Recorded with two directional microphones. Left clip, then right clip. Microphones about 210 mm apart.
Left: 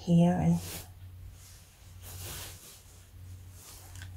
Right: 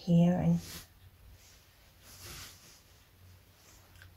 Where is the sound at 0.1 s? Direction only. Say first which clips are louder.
Left 2 dB; 20° left (ahead or behind).